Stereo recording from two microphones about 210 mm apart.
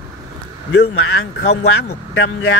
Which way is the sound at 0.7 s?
70° left (ahead or behind).